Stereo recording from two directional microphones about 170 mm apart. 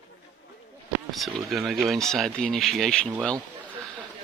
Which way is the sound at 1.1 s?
Centre (ahead or behind).